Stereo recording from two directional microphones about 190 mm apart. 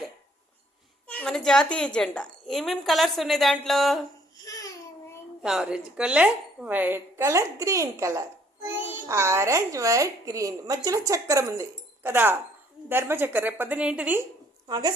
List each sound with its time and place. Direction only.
1.0 s a woman's voice: 5° left (ahead or behind)
4.4 s babbling: 15° left (ahead or behind)
5.4 s a woman's voice: centre (ahead or behind)
14.7 s a woman's voice: 20° right (ahead or behind)